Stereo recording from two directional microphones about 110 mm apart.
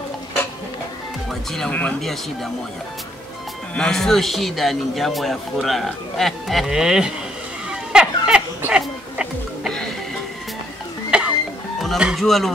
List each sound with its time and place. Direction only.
1.5 s speech: 10° left (ahead or behind)
3.7 s speech: 5° left (ahead or behind)
7.7 s music: 5° right (ahead or behind)
9.7 s music: 5° left (ahead or behind)
11.1 s music: 10° right (ahead or behind)
12.0 s speech: centre (ahead or behind)